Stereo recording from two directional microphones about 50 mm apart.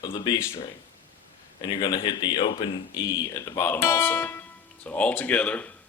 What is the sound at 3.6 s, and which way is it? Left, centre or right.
Speech, left.